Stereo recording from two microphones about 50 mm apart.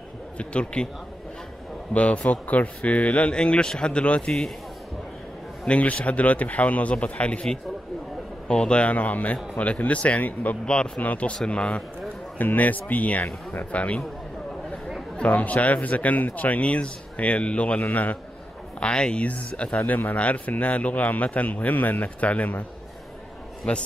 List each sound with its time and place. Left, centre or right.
0.4 s speech: left
2.0 s speech: left
5.7 s speech: left
8.5 s speech: centre
10.6 s speech: centre
11.0 s speech: left
12.4 s speech: left
15.1 s speech: left